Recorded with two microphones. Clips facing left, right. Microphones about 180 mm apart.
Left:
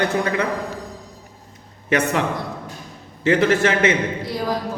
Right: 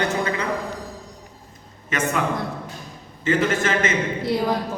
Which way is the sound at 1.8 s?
70° left (ahead or behind).